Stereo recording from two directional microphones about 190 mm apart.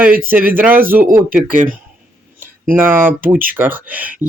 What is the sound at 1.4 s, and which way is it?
Speech, 45° right (ahead or behind).